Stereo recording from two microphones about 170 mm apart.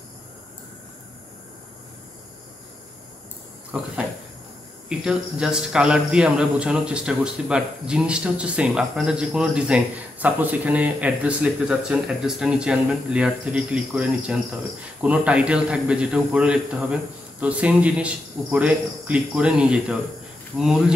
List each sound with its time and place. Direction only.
4.8 s speech: 5° right (ahead or behind)